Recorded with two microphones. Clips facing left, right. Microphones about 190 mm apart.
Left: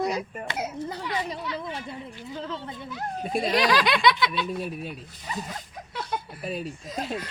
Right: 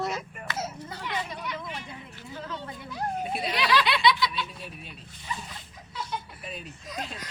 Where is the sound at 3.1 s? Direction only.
40° left (ahead or behind).